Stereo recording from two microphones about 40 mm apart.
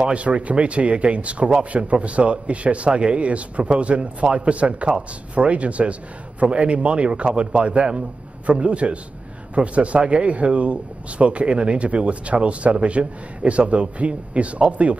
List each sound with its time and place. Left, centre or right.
0.0 s a man's voice: right